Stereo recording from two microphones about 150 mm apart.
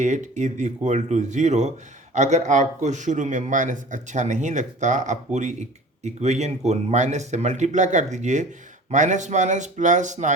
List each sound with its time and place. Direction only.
0.0 s a man's voice: 50° right (ahead or behind)